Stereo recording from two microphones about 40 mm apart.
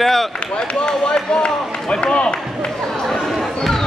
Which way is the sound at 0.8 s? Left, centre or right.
Left.